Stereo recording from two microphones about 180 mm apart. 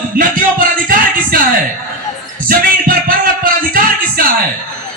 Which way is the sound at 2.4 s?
55° right (ahead or behind).